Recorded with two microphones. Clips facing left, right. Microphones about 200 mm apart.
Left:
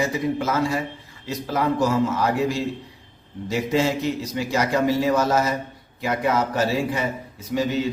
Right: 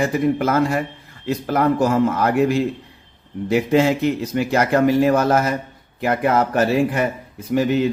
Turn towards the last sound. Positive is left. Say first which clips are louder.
# right 5 dB
turn(degrees=-60)  # may be behind; listen again after turning